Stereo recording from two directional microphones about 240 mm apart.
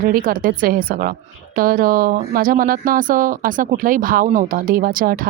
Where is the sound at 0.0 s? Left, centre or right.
Right.